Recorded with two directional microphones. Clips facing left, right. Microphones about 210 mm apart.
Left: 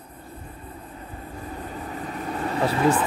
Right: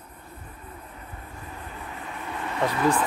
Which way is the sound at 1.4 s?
35° left (ahead or behind).